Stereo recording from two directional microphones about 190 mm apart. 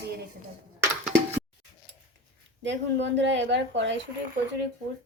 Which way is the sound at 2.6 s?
70° right (ahead or behind).